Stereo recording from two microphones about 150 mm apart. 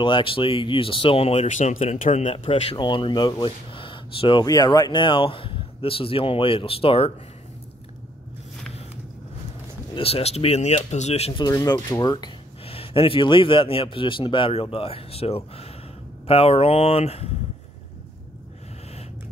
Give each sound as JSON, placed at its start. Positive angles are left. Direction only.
{"t": 0.0, "sound": "speech", "side_deg": 35}
{"t": 9.9, "sound": "speech", "side_deg": 40}
{"t": 11.4, "sound": "speech", "side_deg": 25}
{"t": 12.6, "sound": "speech", "side_deg": 40}